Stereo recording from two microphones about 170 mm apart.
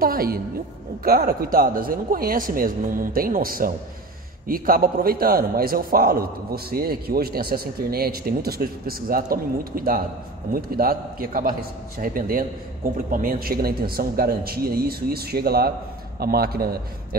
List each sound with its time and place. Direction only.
0.0 s a man's voice: 60° right (ahead or behind)